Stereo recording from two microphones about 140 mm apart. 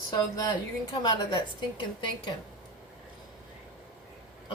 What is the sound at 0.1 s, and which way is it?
A woman's voice, 30° left (ahead or behind).